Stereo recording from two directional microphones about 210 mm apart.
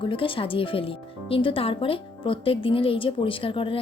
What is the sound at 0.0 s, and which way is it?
Speech, 25° left (ahead or behind).